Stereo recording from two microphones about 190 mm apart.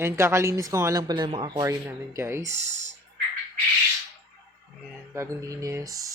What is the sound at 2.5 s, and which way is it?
Speech, 35° right (ahead or behind).